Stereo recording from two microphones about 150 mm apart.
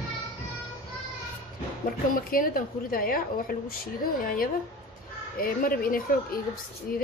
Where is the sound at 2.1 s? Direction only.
70° left (ahead or behind).